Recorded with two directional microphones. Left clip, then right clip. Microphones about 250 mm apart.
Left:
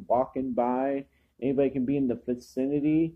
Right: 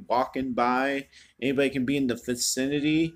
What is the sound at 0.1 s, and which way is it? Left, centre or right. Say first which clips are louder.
A man's voice: even; centre.